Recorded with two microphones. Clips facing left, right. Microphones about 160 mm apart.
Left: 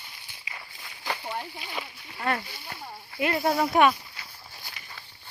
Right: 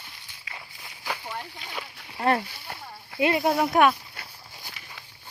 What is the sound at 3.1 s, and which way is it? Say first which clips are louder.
Speech: right 4 dB; 25° right (ahead or behind).